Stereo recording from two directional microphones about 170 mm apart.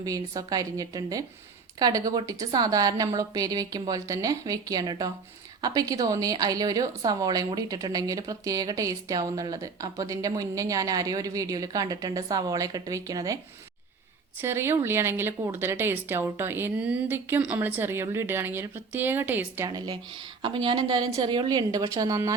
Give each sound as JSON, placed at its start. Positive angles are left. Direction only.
{"t": 0.0, "sound": "a woman's voice", "side_deg": -20}
{"t": 14.4, "sound": "a woman's voice", "side_deg": -15}